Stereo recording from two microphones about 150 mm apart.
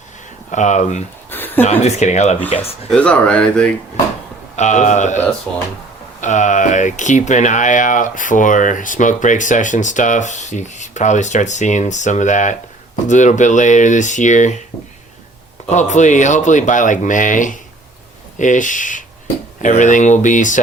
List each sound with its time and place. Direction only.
0.5 s speech: 55° left (ahead or behind)
1.3 s a sound: 15° left (ahead or behind)
1.6 s speech: 45° left (ahead or behind)
2.9 s speech: 5° left (ahead or behind)
4.5 s speech: 50° left (ahead or behind)
15.7 s speech: 50° left (ahead or behind)